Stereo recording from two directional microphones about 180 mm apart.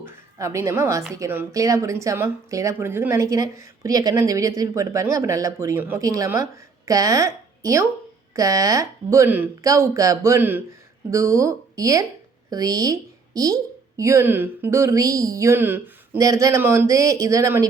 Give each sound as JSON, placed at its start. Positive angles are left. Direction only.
{"t": 0.3, "sound": "speech", "side_deg": -15}